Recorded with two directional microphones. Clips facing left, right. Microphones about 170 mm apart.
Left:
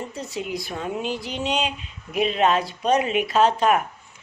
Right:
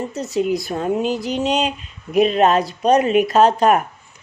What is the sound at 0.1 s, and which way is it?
A woman's voice, 40° right (ahead or behind).